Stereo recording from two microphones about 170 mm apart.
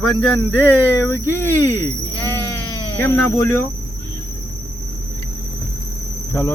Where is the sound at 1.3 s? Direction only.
15° left (ahead or behind).